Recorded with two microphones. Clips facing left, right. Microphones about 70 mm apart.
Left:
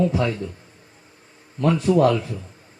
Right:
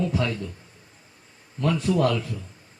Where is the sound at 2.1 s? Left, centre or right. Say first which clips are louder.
Left 4 dB; centre.